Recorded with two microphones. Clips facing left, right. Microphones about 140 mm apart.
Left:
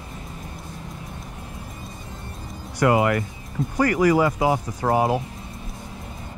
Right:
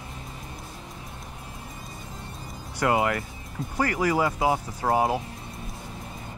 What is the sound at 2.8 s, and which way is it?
Speech, 90° left.